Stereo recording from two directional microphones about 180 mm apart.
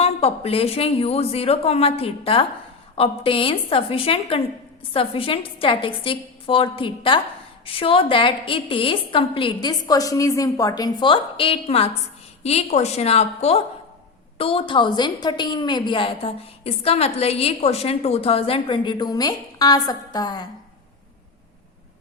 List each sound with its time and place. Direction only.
0.0 s a woman's voice: 35° left (ahead or behind)